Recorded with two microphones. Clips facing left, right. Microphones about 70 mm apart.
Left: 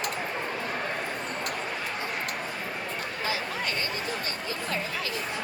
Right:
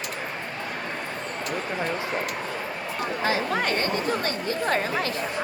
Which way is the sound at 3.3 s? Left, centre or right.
Right.